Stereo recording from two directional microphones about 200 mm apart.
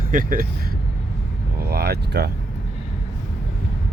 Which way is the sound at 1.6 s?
50° right (ahead or behind).